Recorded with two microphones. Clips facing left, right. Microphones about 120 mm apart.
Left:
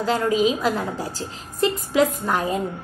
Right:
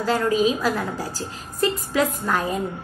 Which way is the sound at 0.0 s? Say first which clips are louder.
Even; 20° left (ahead or behind).